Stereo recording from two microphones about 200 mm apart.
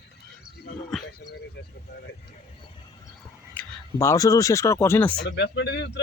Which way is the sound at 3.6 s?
15° left (ahead or behind).